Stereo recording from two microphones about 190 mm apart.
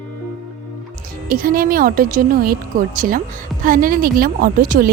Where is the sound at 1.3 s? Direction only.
50° right (ahead or behind).